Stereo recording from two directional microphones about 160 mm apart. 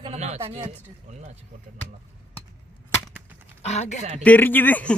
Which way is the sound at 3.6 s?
45° left (ahead or behind).